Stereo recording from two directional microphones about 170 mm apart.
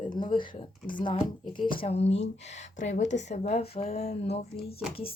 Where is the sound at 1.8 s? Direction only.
40° left (ahead or behind).